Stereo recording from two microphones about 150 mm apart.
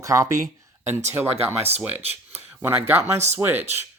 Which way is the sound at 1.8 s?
15° right (ahead or behind).